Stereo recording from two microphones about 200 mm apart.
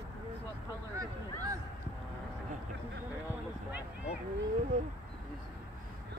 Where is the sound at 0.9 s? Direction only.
15° right (ahead or behind).